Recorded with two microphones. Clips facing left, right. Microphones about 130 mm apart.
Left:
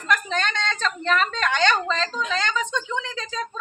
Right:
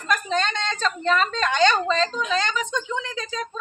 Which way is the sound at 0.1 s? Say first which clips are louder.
Right 1 dB; 15° right (ahead or behind).